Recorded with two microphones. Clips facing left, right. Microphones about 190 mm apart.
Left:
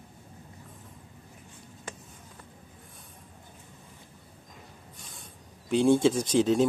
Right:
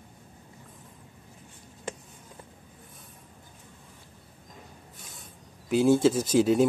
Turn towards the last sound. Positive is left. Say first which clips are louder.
# right 2 dB
turn(degrees=-10)  # may be behind; listen again after turning